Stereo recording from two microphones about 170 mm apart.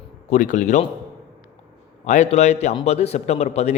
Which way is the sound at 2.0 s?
45° left (ahead or behind).